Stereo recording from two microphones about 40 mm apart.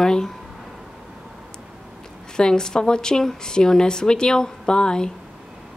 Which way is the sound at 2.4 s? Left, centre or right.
Centre.